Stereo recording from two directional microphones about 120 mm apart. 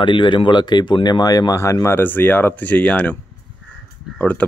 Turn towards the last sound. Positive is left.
turn(degrees=10)  # may be behind; listen again after turning